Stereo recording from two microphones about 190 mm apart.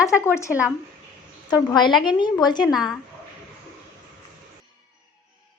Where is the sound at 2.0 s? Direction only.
25° left (ahead or behind).